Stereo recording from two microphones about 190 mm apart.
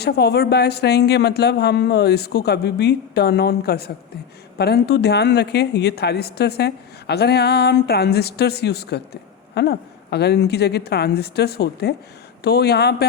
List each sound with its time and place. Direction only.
0.0 s a woman's voice: 60° left (ahead or behind)